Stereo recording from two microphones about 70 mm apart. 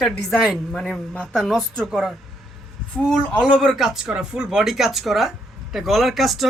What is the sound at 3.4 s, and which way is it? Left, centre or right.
Speech, centre.